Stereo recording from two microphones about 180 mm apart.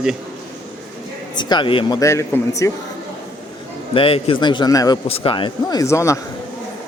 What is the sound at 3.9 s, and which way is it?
Speech, 30° left (ahead or behind).